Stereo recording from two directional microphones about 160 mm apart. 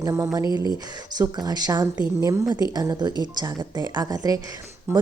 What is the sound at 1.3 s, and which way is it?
A woman's voice, 25° right (ahead or behind).